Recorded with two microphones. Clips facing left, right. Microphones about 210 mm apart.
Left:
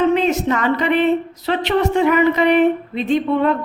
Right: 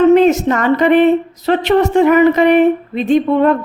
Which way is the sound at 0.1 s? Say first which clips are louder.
Right 7 dB; 45° right (ahead or behind).